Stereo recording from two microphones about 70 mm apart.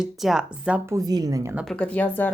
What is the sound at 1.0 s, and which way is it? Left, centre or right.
Speech, right.